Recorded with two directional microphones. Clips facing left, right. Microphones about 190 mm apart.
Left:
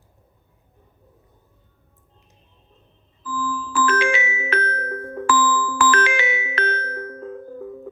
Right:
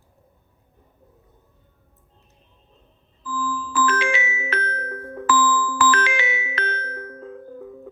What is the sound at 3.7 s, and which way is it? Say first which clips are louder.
Glockenspiel: left 2 dB; 50° left (ahead or behind).